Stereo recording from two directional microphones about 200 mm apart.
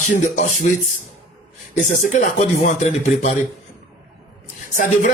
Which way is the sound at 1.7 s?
40° left (ahead or behind).